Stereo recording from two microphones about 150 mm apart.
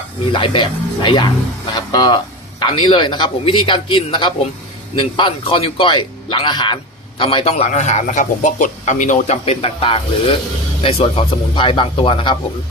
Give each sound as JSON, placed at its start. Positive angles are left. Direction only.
{"t": 0.3, "sound": "a man's voice", "side_deg": 35}